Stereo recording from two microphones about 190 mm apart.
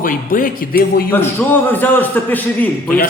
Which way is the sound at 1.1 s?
10° left (ahead or behind).